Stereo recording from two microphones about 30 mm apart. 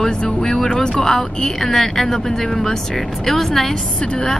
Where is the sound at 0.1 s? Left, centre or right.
Left.